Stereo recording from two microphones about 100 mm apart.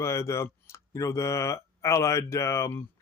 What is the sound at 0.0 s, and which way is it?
Speech, 30° left (ahead or behind).